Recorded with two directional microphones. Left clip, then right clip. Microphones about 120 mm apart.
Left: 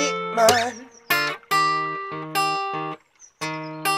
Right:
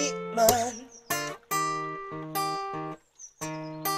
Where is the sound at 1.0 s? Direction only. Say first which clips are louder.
Left 10 dB; 25° left (ahead or behind).